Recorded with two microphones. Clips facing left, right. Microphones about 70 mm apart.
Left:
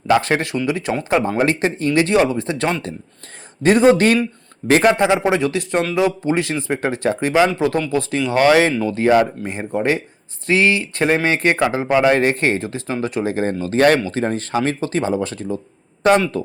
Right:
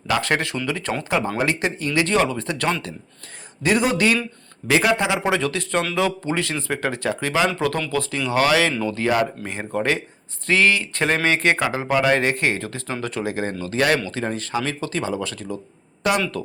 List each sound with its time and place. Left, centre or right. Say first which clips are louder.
0.1 s speech: left 5 dB; left
0.5 s speech: left 5 dB; centre
1.4 s speech: left 5 dB; left
3.6 s speech: left 7 dB; left
12.6 s speech: left 5 dB; left